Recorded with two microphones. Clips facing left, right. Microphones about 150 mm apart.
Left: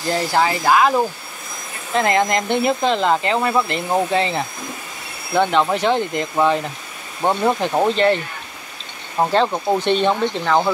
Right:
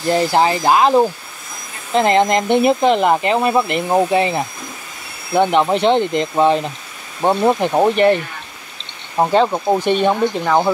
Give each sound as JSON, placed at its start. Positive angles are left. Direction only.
{"t": 0.1, "sound": "speech", "side_deg": -20}
{"t": 9.2, "sound": "speech", "side_deg": -10}